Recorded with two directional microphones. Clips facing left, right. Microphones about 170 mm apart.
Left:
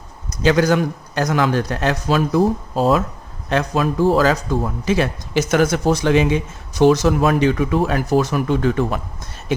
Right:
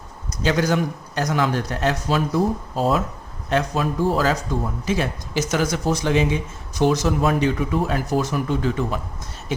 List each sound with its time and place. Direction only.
0.4 s a man's voice: 90° left
4.9 s speech: 75° left (ahead or behind)